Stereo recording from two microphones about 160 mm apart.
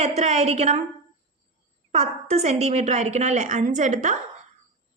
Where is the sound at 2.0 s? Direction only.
40° right (ahead or behind).